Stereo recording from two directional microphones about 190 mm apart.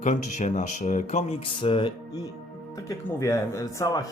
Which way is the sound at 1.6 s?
25° left (ahead or behind).